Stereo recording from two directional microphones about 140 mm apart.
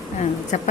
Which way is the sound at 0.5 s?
55° left (ahead or behind).